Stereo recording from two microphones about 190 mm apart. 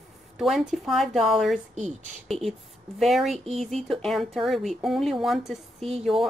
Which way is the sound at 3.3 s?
35° right (ahead or behind).